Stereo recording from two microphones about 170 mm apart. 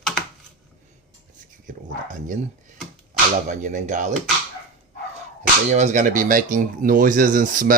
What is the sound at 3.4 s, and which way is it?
Speech, 45° right (ahead or behind).